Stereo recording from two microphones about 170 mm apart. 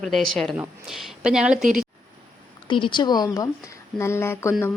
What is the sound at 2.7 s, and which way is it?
Speech, 30° left (ahead or behind).